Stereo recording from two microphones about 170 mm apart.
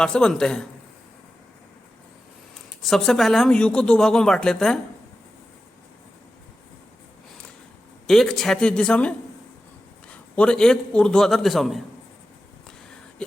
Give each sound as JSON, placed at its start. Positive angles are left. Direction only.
{"t": 0.0, "sound": "speech", "side_deg": 5}
{"t": 2.8, "sound": "speech", "side_deg": 0}
{"t": 8.0, "sound": "speech", "side_deg": 0}